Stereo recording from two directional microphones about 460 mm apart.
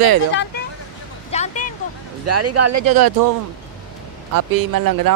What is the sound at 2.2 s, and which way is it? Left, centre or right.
Speech, right.